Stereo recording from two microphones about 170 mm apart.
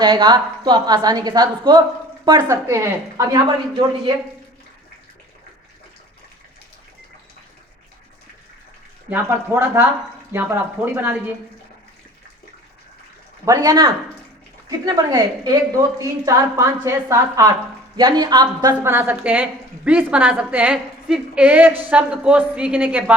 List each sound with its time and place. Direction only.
0.0 s a woman's voice: 25° right (ahead or behind)
9.0 s a woman's voice: 10° right (ahead or behind)
13.4 s a woman's voice: 20° right (ahead or behind)